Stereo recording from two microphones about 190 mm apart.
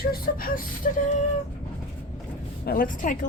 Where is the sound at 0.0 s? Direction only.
50° left (ahead or behind).